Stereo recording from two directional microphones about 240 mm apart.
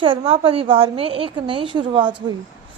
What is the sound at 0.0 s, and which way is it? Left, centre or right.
A woman's voice, right.